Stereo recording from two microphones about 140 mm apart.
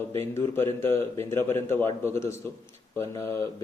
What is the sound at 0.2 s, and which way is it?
A man's voice, 15° left (ahead or behind).